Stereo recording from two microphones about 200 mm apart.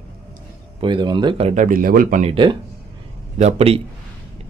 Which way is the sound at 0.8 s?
25° right (ahead or behind).